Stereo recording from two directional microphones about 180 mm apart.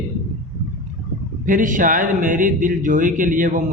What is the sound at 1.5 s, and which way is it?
Speech, 45° right (ahead or behind).